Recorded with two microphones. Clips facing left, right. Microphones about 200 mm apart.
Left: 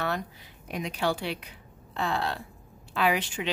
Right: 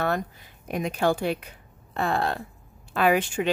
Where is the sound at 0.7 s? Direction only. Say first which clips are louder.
Right 5 dB; 50° right (ahead or behind).